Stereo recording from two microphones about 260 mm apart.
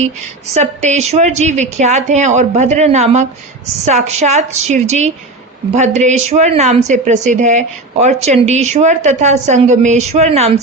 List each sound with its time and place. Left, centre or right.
0.5 s a woman's voice: right